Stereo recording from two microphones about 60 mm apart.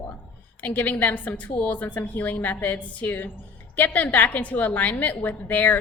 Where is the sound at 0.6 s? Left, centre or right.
Left.